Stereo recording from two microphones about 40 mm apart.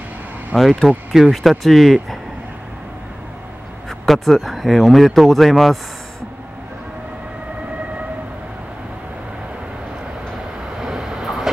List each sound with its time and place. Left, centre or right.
0.5 s speech: centre
4.0 s speech: centre
10.8 s vehicle: centre